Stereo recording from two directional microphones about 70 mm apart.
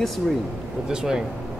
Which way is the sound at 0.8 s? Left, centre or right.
Centre.